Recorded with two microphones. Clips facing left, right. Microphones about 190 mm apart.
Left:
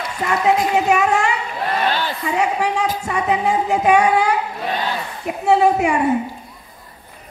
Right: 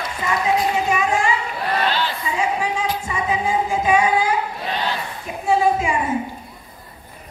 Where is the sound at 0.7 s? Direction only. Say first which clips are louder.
Left 4 dB; 70° left (ahead or behind).